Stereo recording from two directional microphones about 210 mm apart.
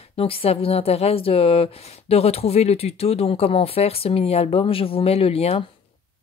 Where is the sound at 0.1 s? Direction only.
25° left (ahead or behind).